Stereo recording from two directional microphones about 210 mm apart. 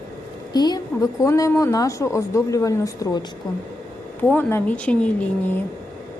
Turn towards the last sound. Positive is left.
turn(degrees=5)  # may be behind; listen again after turning